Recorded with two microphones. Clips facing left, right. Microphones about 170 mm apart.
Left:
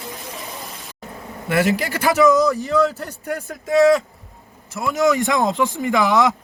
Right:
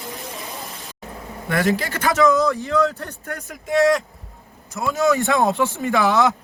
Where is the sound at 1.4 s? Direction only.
10° left (ahead or behind).